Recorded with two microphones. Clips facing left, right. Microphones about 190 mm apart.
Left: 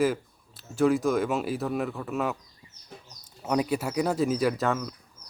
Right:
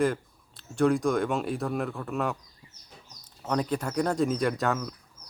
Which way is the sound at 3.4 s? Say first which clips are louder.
Left 2 dB; 10° left (ahead or behind).